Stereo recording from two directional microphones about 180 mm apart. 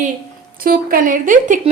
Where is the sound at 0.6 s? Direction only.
55° right (ahead or behind).